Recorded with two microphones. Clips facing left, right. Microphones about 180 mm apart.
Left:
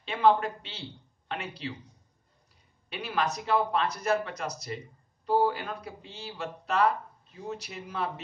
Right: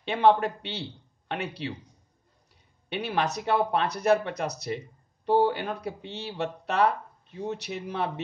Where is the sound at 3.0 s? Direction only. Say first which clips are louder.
Right 3 dB; 65° right (ahead or behind).